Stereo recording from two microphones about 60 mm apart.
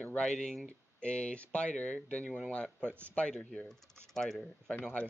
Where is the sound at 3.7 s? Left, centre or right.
Centre.